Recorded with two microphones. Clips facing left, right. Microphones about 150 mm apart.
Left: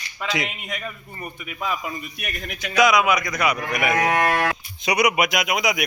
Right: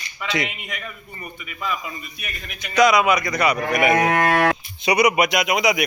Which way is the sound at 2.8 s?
Centre (ahead or behind).